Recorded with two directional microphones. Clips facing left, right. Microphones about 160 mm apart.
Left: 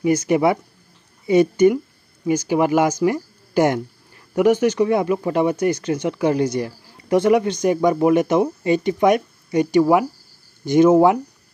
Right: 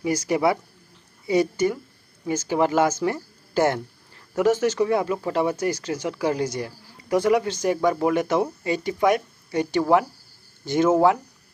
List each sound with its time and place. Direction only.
0.0 s speech: 20° left (ahead or behind)